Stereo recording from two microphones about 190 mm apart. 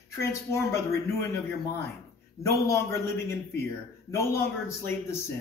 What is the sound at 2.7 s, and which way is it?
Speech, 15° left (ahead or behind).